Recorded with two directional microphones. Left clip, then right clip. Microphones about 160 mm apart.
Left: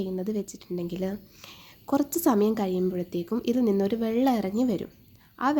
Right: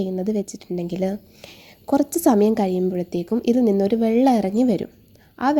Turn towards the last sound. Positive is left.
turn(degrees=-25)  # may be behind; listen again after turning